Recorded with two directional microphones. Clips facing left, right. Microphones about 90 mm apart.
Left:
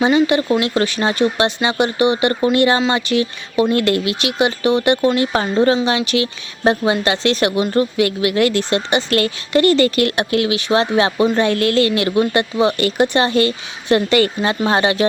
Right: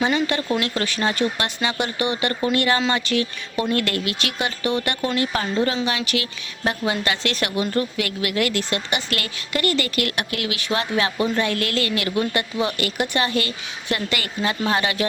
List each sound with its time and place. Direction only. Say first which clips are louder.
0.3 s speech: left 7 dB; 15° left (ahead or behind)